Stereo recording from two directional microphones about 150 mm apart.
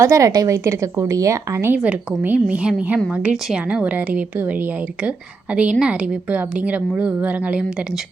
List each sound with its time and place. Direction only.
0.0 s a woman's voice: 20° right (ahead or behind)